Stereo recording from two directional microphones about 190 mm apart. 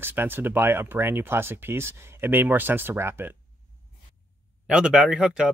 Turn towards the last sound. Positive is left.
turn(degrees=-5)  # may be behind; listen again after turning